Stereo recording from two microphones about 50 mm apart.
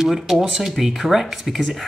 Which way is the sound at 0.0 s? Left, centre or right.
Centre.